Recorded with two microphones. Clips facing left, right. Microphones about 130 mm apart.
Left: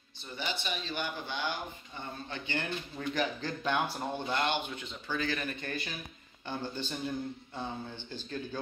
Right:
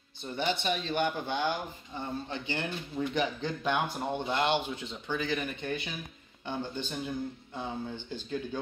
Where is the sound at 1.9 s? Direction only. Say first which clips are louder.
Right 6 dB; 35° right (ahead or behind).